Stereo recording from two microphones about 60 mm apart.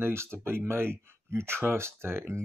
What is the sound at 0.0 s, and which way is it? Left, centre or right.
Speech, right.